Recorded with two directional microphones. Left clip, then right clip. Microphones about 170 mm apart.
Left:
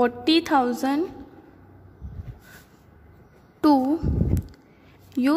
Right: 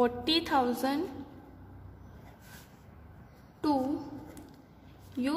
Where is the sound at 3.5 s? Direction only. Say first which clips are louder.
Left 11 dB; 40° left (ahead or behind).